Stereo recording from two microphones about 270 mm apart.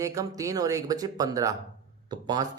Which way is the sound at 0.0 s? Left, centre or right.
Centre.